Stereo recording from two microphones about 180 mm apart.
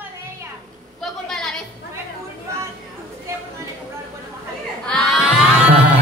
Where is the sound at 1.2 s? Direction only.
5° left (ahead or behind).